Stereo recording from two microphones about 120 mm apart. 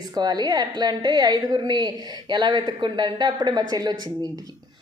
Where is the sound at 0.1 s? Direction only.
35° right (ahead or behind).